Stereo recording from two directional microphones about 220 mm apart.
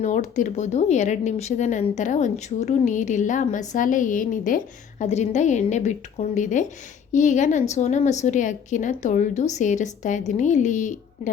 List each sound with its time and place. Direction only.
0.0 s speech: 35° left (ahead or behind)